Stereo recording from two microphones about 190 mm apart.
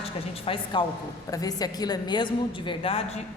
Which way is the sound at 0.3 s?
30° left (ahead or behind).